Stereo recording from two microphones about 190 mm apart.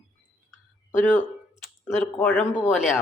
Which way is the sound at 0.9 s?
10° left (ahead or behind).